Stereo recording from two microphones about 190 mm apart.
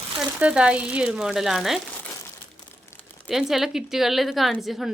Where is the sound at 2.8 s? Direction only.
15° left (ahead or behind).